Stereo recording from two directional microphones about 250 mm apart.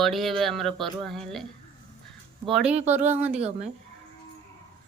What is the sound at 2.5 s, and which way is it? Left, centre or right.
Speech, centre.